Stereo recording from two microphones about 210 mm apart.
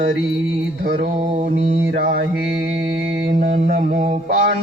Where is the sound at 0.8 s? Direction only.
50° right (ahead or behind).